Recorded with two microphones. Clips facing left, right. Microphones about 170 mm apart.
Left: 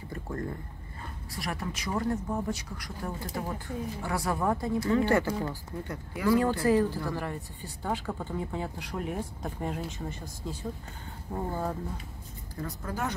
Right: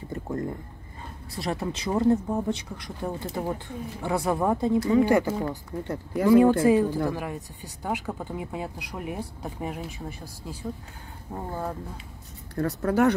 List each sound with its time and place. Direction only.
0.1 s a sound: 20° right (ahead or behind)
1.3 s speech: 25° right (ahead or behind); by 10.2 s 10° right (ahead or behind)
11.3 s speech: 5° right (ahead or behind)
12.5 s speech: 70° right (ahead or behind)